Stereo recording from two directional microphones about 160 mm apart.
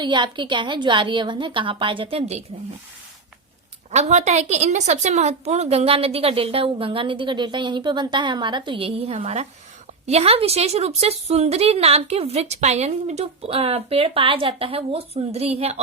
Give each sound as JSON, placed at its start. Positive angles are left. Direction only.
{"t": 0.0, "sound": "a woman's voice", "side_deg": -30}
{"t": 3.9, "sound": "a woman's voice", "side_deg": -45}